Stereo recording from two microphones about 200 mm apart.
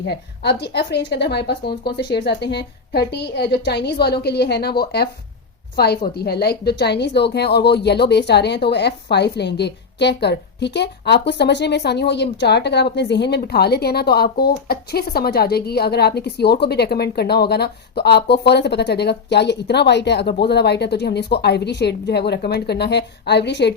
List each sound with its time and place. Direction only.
0.0 s a woman's voice: 55° left (ahead or behind)